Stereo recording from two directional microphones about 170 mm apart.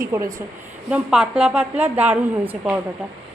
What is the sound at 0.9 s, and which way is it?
A woman's voice, 5° right (ahead or behind).